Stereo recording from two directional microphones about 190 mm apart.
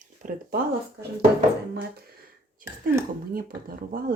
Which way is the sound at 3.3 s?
50° right (ahead or behind).